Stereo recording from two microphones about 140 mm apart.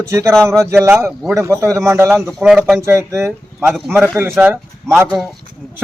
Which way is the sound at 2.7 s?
20° right (ahead or behind).